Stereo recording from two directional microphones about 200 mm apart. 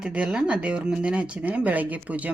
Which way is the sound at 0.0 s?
5° right (ahead or behind).